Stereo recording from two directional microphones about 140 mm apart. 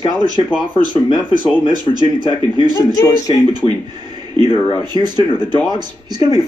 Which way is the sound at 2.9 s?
25° left (ahead or behind).